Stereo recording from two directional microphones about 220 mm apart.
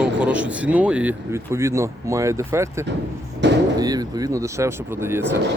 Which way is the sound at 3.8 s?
15° right (ahead or behind).